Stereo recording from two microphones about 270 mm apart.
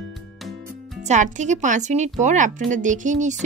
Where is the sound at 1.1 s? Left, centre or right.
Right.